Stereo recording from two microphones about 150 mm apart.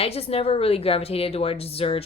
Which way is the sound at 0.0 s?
40° left (ahead or behind).